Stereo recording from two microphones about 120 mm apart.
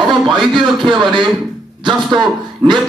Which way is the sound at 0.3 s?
40° right (ahead or behind).